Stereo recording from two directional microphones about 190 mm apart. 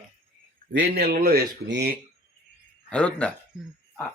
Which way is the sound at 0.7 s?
60° right (ahead or behind).